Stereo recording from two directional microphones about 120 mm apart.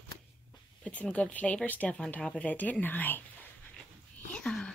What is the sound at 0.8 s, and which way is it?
Speech, 10° left (ahead or behind).